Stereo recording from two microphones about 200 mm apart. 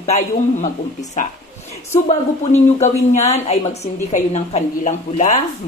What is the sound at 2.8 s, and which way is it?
A woman's voice, 35° left (ahead or behind).